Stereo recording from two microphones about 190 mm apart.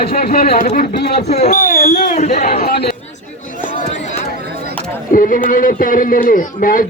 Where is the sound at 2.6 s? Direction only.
55° left (ahead or behind).